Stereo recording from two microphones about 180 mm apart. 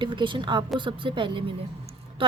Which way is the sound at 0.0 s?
25° right (ahead or behind).